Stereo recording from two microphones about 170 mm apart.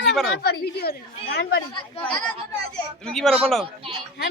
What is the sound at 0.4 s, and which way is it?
A woman's voice, 70° left (ahead or behind).